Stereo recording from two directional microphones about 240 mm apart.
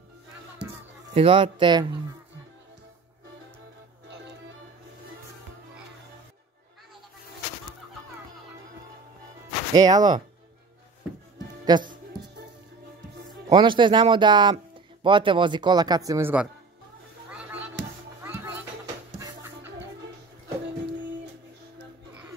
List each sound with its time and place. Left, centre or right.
1.1 s speech: right
9.8 s speech: centre
11.6 s speech: centre
13.5 s speech: centre
17.3 s music: centre